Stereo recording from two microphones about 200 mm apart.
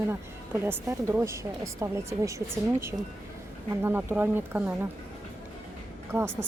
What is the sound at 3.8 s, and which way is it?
A woman's voice, 10° right (ahead or behind).